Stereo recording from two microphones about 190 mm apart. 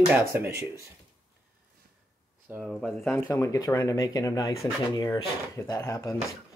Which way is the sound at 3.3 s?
20° left (ahead or behind).